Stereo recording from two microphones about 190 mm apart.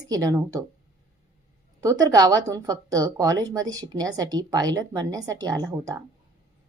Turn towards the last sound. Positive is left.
turn(degrees=-20)  # may be behind; listen again after turning